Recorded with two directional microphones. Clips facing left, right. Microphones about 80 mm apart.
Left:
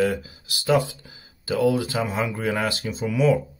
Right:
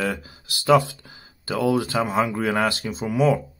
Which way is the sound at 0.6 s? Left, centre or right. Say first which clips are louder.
Right 3 dB; right.